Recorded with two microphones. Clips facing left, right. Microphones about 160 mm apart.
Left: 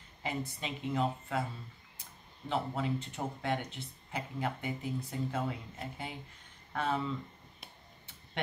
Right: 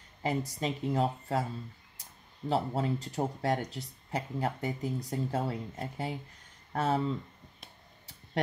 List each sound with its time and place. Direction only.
0.2 s speech: 40° right (ahead or behind)
2.5 s speech: 40° right (ahead or behind)